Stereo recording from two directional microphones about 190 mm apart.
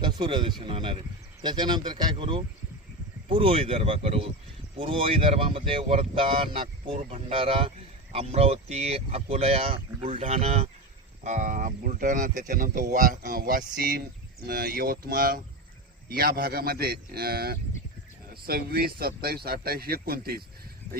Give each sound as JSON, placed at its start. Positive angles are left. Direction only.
{"t": 0.0, "sound": "speech", "side_deg": -25}